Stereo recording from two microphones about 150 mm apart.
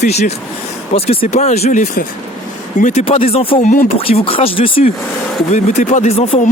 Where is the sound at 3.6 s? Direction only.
60° left (ahead or behind).